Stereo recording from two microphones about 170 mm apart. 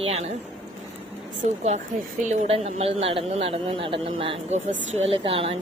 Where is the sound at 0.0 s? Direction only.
35° right (ahead or behind).